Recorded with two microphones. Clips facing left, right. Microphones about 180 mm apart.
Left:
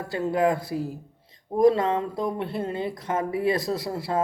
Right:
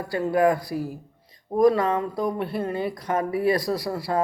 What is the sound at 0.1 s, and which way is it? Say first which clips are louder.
Speech: right 2 dB; 25° left (ahead or behind).